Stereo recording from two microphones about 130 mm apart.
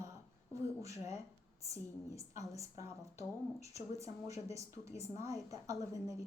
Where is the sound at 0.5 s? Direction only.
25° right (ahead or behind).